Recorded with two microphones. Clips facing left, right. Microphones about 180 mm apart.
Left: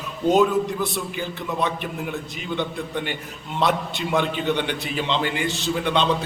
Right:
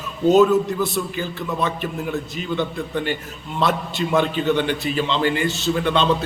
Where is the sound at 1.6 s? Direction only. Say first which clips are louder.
Right 1 dB; 15° left (ahead or behind).